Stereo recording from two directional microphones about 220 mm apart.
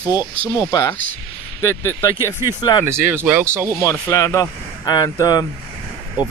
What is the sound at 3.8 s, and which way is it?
Speech, 15° left (ahead or behind).